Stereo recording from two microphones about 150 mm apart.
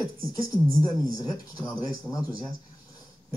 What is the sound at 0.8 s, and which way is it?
Speech, 25° left (ahead or behind).